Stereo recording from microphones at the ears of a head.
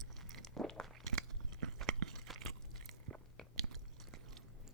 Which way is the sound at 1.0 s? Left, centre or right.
Right.